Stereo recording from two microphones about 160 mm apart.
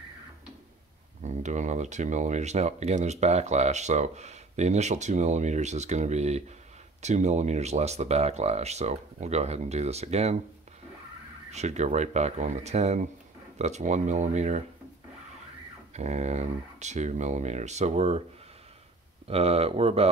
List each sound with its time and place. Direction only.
1.2 s speech: 50° right (ahead or behind)
11.5 s speech: 45° right (ahead or behind)
15.9 s speech: 45° right (ahead or behind)
19.2 s speech: 40° right (ahead or behind)